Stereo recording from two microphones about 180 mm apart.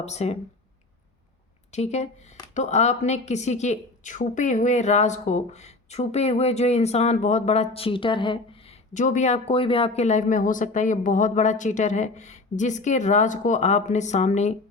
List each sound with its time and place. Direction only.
0.0 s a woman's voice: 35° left (ahead or behind)
1.7 s a woman's voice: 40° left (ahead or behind)